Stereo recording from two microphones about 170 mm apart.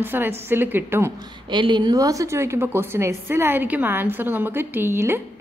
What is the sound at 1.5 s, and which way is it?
A woman's voice, 25° right (ahead or behind).